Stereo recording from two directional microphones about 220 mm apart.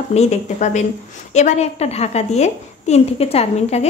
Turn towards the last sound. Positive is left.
turn(degrees=30)  # may be behind; listen again after turning